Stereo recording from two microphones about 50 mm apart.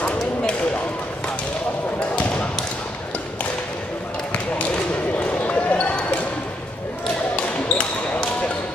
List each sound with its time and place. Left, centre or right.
5.3 s basketball bounce: left
7.3 s basketball bounce: centre